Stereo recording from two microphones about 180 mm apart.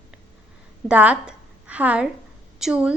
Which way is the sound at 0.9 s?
5° right (ahead or behind).